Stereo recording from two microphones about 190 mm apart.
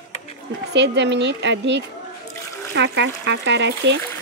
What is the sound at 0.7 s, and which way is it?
Speech, 65° right (ahead or behind).